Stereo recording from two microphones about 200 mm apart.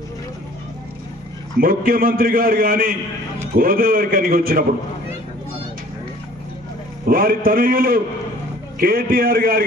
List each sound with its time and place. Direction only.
1.6 s a man's voice: 45° right (ahead or behind)
7.1 s a man's voice: 45° right (ahead or behind)